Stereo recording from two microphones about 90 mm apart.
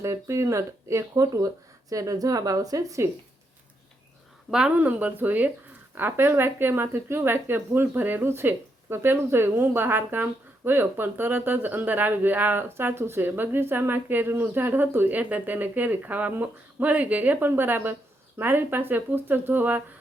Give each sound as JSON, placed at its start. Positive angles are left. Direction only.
{"t": 0.0, "sound": "speech", "side_deg": -30}
{"t": 4.5, "sound": "speech", "side_deg": -10}